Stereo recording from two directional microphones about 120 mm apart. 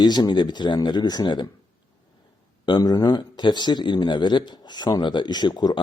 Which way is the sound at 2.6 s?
35° left (ahead or behind).